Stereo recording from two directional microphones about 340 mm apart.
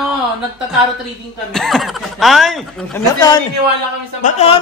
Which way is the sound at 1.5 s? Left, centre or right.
Centre.